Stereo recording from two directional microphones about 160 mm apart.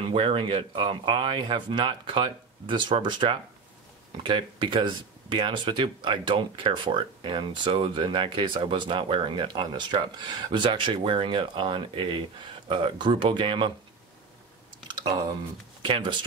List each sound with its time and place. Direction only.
0.0 s speech: 35° right (ahead or behind)
15.8 s speech: 30° right (ahead or behind)